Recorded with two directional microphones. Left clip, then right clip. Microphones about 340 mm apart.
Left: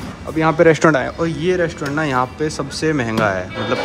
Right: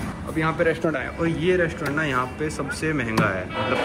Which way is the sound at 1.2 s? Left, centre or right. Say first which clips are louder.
Left 4 dB; centre.